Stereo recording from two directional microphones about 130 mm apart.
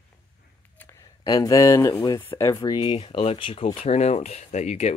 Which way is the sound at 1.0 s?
30° left (ahead or behind).